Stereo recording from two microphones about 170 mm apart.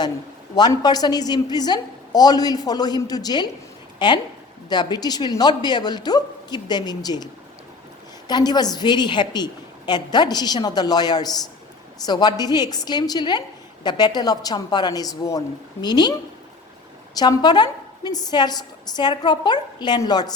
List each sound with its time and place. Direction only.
0.5 s a woman's voice: 25° left (ahead or behind)
8.3 s a woman's voice: 25° left (ahead or behind)
17.2 s a woman's voice: 25° left (ahead or behind)